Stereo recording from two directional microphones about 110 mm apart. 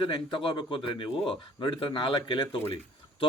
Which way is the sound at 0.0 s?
45° left (ahead or behind).